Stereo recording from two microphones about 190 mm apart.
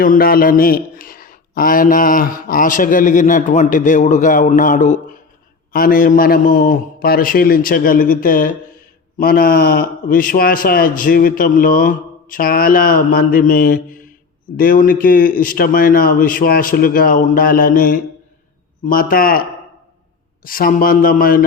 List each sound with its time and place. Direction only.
0.0 s speech: 50° left (ahead or behind)
20.4 s speech: 50° left (ahead or behind)